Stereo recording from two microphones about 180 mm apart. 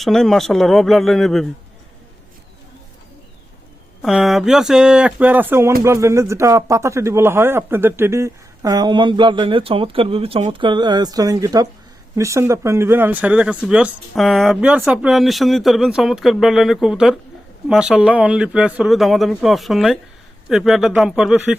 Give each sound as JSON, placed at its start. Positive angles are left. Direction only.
{"t": 0.0, "sound": "speech", "side_deg": 0}
{"t": 4.0, "sound": "speech", "side_deg": 0}